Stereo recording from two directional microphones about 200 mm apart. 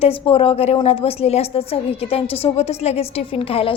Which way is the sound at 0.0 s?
30° left (ahead or behind).